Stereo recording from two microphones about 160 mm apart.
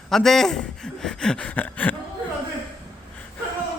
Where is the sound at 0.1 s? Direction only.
Centre (ahead or behind).